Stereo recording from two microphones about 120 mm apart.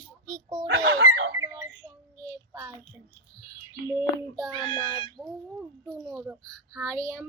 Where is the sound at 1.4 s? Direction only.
25° right (ahead or behind).